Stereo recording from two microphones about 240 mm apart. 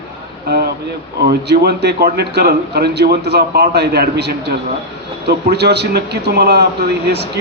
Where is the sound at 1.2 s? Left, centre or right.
Right.